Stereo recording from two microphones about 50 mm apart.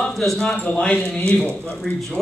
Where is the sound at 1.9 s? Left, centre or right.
Centre.